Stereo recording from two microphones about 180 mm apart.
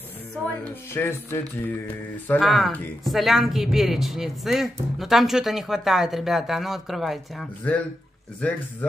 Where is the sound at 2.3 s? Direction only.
Centre (ahead or behind).